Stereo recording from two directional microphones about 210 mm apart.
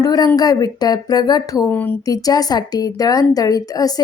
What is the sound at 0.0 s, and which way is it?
Speech, 15° left (ahead or behind).